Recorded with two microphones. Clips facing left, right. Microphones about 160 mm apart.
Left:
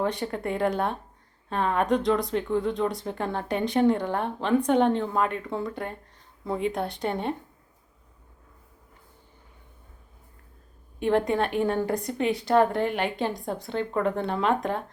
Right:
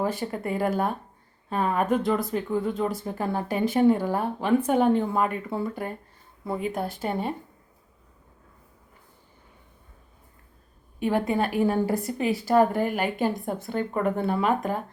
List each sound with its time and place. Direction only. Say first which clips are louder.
0.0 s speech: even; 5° right (ahead or behind)
11.0 s speech: left 1 dB; 5° right (ahead or behind)